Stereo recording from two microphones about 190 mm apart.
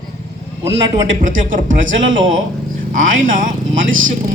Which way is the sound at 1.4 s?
45° right (ahead or behind).